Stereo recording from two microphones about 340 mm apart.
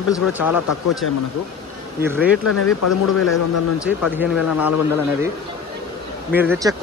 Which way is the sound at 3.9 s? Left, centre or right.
Centre.